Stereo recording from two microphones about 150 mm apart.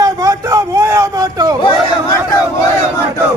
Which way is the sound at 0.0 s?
20° right (ahead or behind).